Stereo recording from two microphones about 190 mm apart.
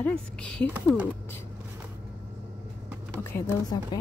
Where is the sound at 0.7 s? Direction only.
5° right (ahead or behind).